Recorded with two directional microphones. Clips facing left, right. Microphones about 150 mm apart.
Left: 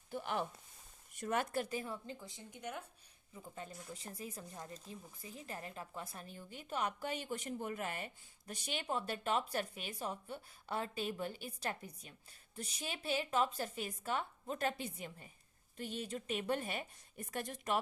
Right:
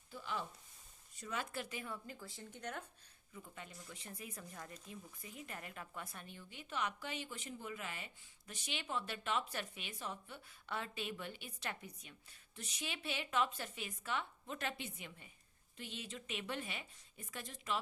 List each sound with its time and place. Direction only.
0.1 s a sound: 60° left (ahead or behind)
1.2 s a woman's voice: 55° left (ahead or behind)
1.7 s speech: 30° left (ahead or behind); by 2.8 s 10° left (ahead or behind)
3.3 s a woman's voice: 35° left (ahead or behind); by 17.7 s 50° left (ahead or behind)